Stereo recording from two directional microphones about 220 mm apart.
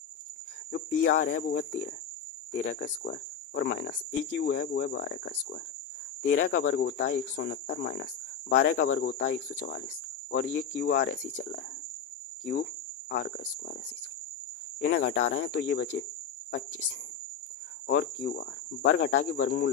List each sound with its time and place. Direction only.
0.7 s speech: 40° left (ahead or behind)
6.2 s speech: 40° left (ahead or behind)
6.5 s speech: 65° left (ahead or behind); by 11.2 s 40° left (ahead or behind)
13.1 s speech: 50° left (ahead or behind)
14.8 s speech: 50° left (ahead or behind)
17.8 s speech: 55° left (ahead or behind)